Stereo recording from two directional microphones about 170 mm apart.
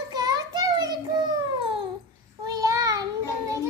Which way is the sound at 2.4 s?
20° right (ahead or behind).